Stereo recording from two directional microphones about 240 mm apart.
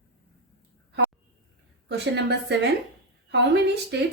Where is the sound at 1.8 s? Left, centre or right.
Right.